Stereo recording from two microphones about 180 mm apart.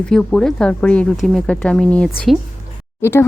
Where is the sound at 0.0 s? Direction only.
5° left (ahead or behind).